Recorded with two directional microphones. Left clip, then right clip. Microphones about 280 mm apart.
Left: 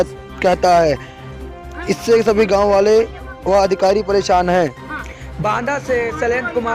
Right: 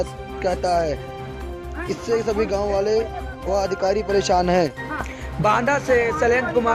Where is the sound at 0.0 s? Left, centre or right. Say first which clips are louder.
Left 8 dB; left; by 4.7 s centre.